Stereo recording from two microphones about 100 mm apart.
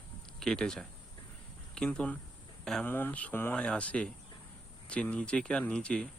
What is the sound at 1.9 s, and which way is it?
Speech, 15° left (ahead or behind).